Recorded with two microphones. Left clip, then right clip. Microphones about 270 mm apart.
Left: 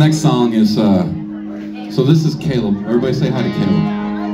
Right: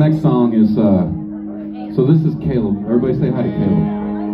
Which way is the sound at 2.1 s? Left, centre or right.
Left.